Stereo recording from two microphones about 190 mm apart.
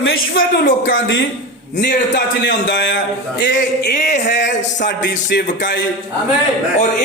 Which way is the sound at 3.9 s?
40° left (ahead or behind).